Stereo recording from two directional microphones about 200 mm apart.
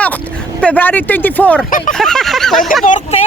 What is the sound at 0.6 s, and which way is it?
Speech, 5° left (ahead or behind).